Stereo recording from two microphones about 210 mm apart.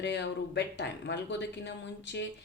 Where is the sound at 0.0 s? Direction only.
55° left (ahead or behind).